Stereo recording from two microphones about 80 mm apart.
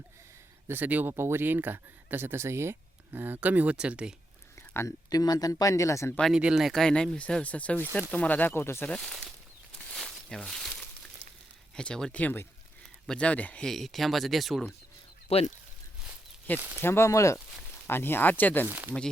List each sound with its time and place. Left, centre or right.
0.7 s speech: right
4.7 s speech: left
5.0 s speech: left
6.3 s speech: centre
6.7 s speech: centre; by 8.9 s left
8.9 s speech: centre
9.7 s a sound: centre
11.8 s speech: centre
13.7 s speech: centre
16.5 s speech: left
16.8 s speech: left
17.8 s speech: left
18.7 s speech: right